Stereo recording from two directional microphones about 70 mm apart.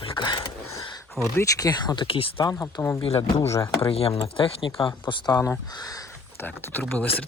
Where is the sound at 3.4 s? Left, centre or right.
Left.